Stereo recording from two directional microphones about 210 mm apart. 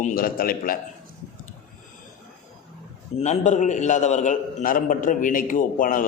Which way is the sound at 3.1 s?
35° left (ahead or behind).